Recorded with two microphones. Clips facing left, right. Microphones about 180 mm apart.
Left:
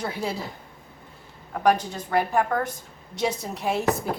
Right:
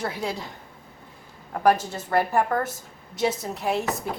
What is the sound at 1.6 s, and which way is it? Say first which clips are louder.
A woman's voice: right 1 dB; 5° right (ahead or behind).